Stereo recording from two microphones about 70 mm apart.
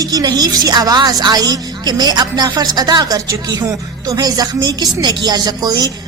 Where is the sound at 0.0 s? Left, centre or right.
Right.